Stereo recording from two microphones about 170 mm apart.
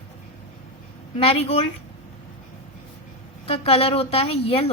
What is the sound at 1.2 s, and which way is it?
Speech, 35° left (ahead or behind).